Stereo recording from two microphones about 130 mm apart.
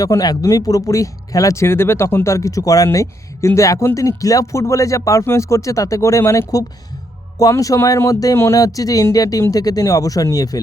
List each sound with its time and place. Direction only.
0.0 s speech: 30° left (ahead or behind)